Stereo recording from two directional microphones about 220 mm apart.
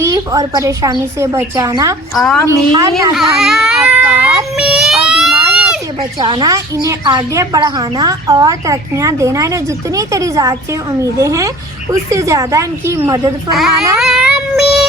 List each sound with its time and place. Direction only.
0.0 s a woman's voice: 15° right (ahead or behind)
2.1 s speech: 5° left (ahead or behind)
2.5 s a woman's voice: 15° right (ahead or behind)
3.2 s baby cry: centre (ahead or behind)
6.0 s a woman's voice: 20° right (ahead or behind)
13.5 s speech: centre (ahead or behind)
14.0 s child singing: centre (ahead or behind)